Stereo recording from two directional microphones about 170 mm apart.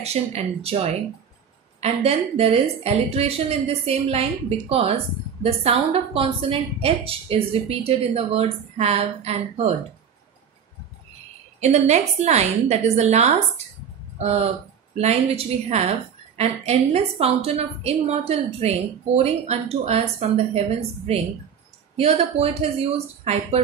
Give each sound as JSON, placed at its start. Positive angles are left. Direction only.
{"t": 0.0, "sound": "a woman's voice", "side_deg": -40}
{"t": 11.6, "sound": "a woman's voice", "side_deg": -40}
{"t": 21.9, "sound": "a woman's voice", "side_deg": -35}